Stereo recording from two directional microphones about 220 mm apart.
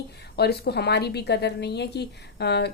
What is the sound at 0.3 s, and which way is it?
A woman's voice, 45° left (ahead or behind).